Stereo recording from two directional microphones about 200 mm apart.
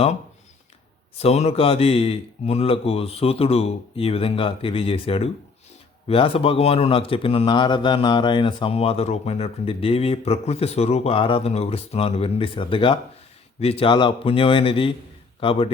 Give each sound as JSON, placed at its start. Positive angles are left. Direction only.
{"t": 1.1, "sound": "speech", "side_deg": 30}